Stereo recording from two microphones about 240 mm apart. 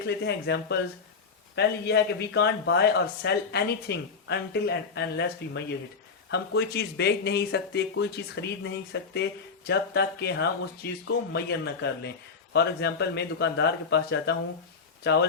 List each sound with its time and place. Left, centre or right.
0.0 s speech: left